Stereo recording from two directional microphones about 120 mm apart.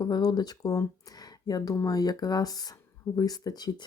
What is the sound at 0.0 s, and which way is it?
Speech, 35° left (ahead or behind).